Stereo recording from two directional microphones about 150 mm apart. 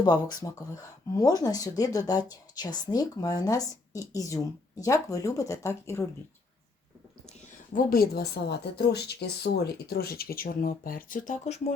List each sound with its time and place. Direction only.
0.0 s speech: 25° left (ahead or behind)
7.7 s speech: 70° left (ahead or behind)